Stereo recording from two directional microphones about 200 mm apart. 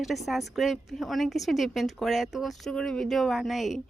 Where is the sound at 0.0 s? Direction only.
Centre (ahead or behind).